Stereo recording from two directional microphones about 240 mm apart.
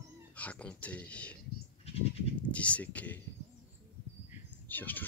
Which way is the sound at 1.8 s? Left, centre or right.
Left.